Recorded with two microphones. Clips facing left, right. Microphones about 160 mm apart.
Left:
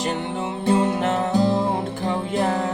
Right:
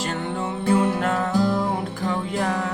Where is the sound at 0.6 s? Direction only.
20° left (ahead or behind).